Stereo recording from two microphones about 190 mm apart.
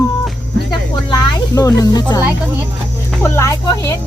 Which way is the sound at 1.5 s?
15° left (ahead or behind).